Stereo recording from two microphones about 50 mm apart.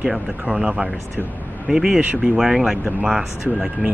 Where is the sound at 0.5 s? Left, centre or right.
Centre.